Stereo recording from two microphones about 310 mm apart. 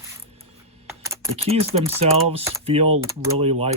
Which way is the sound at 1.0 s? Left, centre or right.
Centre.